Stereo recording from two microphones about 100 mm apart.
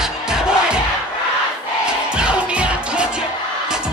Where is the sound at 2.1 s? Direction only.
10° right (ahead or behind).